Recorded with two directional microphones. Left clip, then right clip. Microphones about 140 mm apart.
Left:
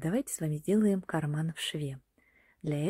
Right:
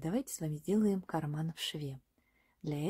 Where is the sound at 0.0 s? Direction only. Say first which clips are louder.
Left 4 dB; 20° left (ahead or behind).